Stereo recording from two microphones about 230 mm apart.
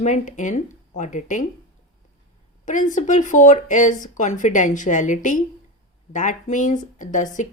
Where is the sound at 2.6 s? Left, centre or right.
Left.